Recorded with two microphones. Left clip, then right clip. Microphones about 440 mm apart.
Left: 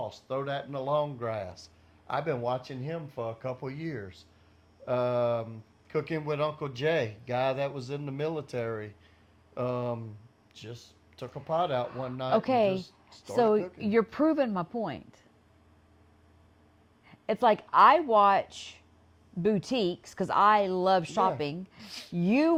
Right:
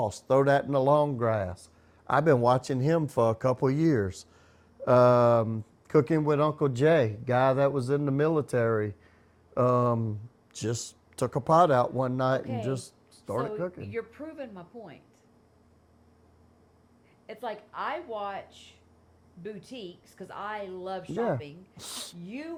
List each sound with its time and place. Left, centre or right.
0.0 s speech: right
2.0 s speech: right
10.6 s speech: right
13.3 s a woman's voice: left
17.2 s speech: left